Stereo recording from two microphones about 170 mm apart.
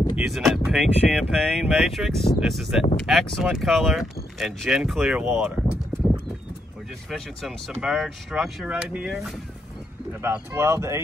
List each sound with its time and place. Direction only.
0.1 s speech: centre (ahead or behind)
7.1 s speech: centre (ahead or behind)
10.2 s speech: 15° right (ahead or behind)